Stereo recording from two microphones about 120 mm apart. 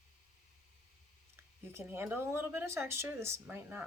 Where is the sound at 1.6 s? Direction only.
20° right (ahead or behind).